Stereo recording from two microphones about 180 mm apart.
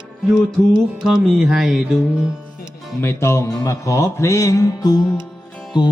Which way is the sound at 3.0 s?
15° left (ahead or behind).